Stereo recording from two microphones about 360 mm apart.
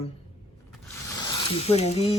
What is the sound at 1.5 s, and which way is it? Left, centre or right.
Speech, centre.